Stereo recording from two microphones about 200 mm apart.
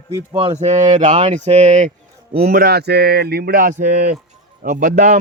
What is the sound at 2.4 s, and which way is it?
Speech, 50° right (ahead or behind).